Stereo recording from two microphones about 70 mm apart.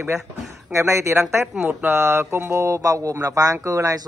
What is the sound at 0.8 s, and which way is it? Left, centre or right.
Speech, right.